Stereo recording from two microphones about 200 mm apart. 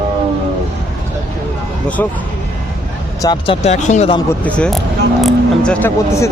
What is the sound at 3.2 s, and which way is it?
Speech, 25° left (ahead or behind).